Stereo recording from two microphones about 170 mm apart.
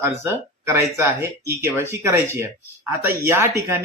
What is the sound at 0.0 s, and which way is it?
Speech, 15° right (ahead or behind).